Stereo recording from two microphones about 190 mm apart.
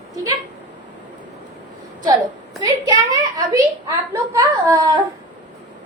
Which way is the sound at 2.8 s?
20° right (ahead or behind).